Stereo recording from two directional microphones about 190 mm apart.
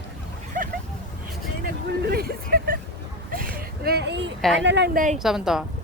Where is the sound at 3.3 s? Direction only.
50° right (ahead or behind); by 4.3 s 65° right (ahead or behind).